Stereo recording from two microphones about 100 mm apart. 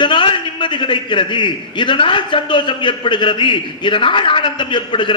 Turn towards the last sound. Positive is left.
turn(degrees=55)  # may be behind; listen again after turning